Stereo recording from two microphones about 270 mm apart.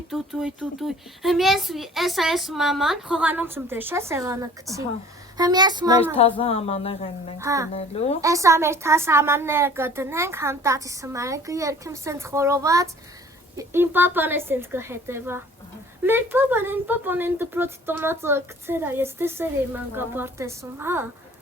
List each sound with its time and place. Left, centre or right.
0.1 s speech: centre
6.1 s a woman's voice: left
7.3 s speech: centre
7.7 s a woman's voice: left
8.2 s speech: centre